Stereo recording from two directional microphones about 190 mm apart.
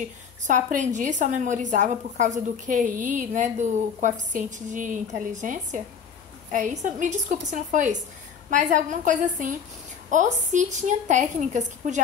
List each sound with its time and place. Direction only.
0.5 s a woman's voice: 40° right (ahead or behind)